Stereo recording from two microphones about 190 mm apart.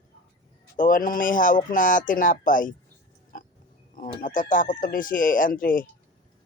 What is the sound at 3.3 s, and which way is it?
Pig, 45° left (ahead or behind).